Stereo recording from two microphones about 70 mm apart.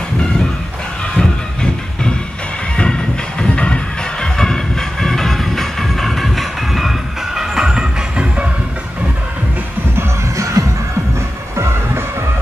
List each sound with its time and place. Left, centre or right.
1.1 s music: centre
10.3 s music: right